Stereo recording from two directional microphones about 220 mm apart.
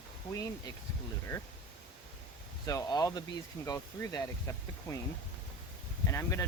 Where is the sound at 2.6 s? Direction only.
15° left (ahead or behind).